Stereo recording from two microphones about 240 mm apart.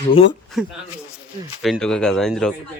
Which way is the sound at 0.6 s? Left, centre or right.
Centre.